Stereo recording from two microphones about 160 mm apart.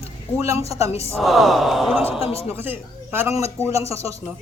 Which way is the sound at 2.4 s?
15° right (ahead or behind).